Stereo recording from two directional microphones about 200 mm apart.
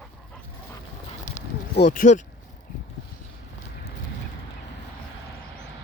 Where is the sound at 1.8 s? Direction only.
40° left (ahead or behind).